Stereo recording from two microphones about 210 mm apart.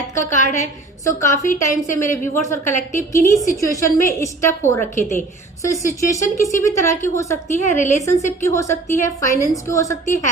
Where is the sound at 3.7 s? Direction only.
15° left (ahead or behind).